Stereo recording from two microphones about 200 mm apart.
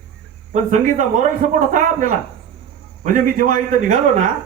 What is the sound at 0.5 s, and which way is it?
A man's voice, 35° right (ahead or behind).